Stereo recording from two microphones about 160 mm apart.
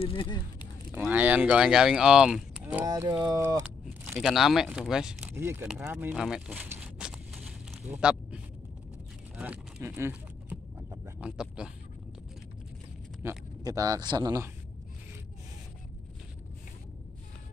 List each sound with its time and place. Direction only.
0.0 s speech: 30° left (ahead or behind)
0.9 s speech: 10° right (ahead or behind)
2.6 s speech: 20° right (ahead or behind)
4.1 s speech: centre (ahead or behind)
5.3 s speech: 15° right (ahead or behind)
6.1 s a sound: centre (ahead or behind)
9.4 s a sound: 10° right (ahead or behind)
13.2 s speech: 20° right (ahead or behind)